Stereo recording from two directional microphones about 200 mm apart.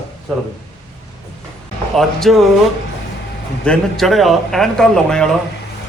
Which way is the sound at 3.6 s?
5° left (ahead or behind).